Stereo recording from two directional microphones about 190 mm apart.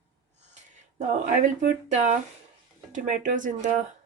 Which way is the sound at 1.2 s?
40° right (ahead or behind).